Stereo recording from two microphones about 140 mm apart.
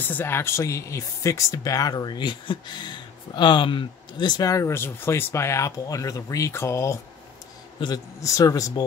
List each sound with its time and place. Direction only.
0.0 s speech: 15° left (ahead or behind)